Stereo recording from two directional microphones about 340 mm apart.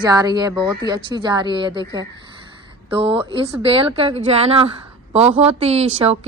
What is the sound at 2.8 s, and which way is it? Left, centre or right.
A woman's voice, centre.